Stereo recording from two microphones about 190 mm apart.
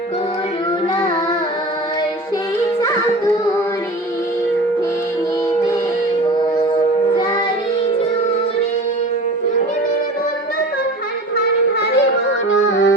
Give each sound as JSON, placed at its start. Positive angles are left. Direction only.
{"t": 6.7, "sound": "child singing", "side_deg": 25}
{"t": 11.3, "sound": "a sound", "side_deg": 65}
{"t": 12.5, "sound": "music", "side_deg": 65}